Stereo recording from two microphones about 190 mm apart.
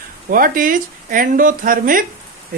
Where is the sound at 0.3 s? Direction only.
45° right (ahead or behind).